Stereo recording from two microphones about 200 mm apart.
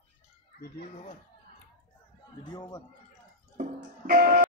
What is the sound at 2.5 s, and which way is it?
Speech, 20° left (ahead or behind).